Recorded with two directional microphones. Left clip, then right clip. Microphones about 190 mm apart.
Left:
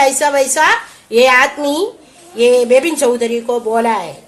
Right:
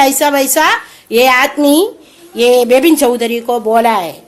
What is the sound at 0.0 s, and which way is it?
A woman's voice, 40° right (ahead or behind).